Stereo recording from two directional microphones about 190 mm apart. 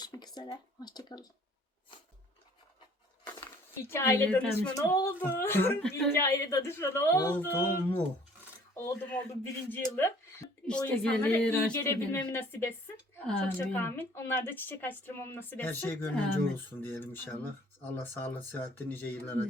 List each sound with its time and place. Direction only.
0.0 s speech: 20° left (ahead or behind)
3.8 s a woman's voice: 15° left (ahead or behind)